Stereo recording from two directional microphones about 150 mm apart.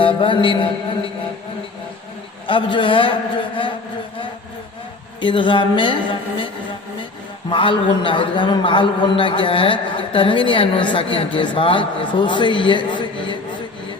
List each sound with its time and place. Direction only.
0.0 s mantra: 35° left (ahead or behind)
2.5 s a man's voice: 35° left (ahead or behind)
5.2 s a man's voice: 35° left (ahead or behind)
7.5 s a man's voice: 35° left (ahead or behind)